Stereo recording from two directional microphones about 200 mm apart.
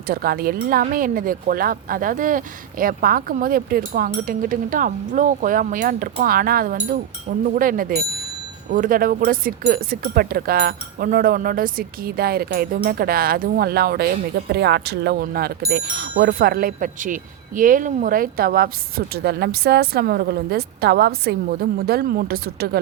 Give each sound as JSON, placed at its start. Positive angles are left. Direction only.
{"t": 0.1, "sound": "speech", "side_deg": -50}